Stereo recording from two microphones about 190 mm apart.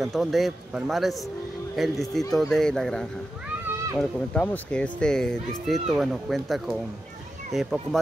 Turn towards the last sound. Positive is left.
turn(degrees=0)  # may be behind; listen again after turning